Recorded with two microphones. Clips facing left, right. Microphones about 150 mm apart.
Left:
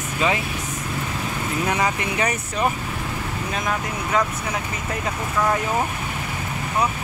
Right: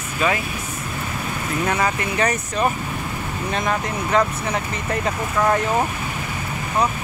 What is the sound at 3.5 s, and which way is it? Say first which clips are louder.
Speech: right 4 dB; centre (ahead or behind).